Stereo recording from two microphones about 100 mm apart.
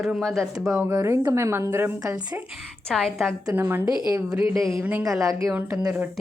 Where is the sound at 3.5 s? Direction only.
20° right (ahead or behind).